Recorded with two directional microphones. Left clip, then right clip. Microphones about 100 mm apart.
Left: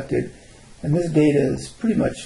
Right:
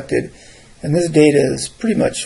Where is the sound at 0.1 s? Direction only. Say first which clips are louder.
Right 6 dB; 15° right (ahead or behind).